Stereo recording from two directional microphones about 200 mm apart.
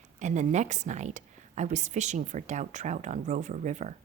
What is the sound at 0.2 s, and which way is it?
A woman's voice, 35° right (ahead or behind).